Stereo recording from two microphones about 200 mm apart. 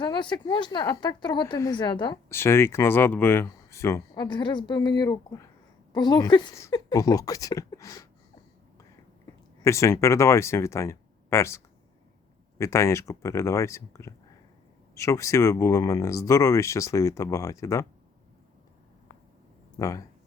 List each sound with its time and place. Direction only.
0.0 s speech: 25° left (ahead or behind)
9.6 s speech: 15° left (ahead or behind)
19.7 s speech: 15° left (ahead or behind)